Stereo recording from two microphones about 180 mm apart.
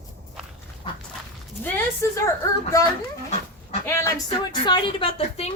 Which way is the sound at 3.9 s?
20° left (ahead or behind).